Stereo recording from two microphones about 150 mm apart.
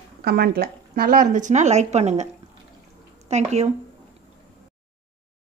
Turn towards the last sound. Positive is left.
turn(degrees=-50)  # may be behind; listen again after turning